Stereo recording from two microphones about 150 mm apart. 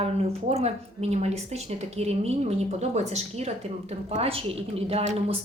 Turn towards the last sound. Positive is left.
turn(degrees=-45)  # may be behind; listen again after turning